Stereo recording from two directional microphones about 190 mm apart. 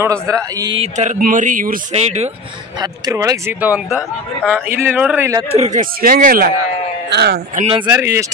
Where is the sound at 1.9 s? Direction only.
35° right (ahead or behind).